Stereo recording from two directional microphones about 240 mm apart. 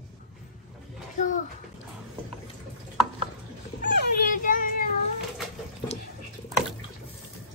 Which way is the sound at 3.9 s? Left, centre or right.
Left.